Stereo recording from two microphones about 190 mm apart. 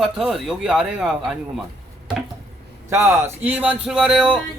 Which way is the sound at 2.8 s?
15° right (ahead or behind).